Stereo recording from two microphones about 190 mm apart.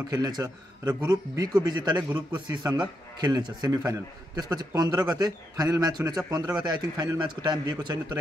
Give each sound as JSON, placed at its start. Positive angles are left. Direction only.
{"t": 0.1, "sound": "a man's voice", "side_deg": -20}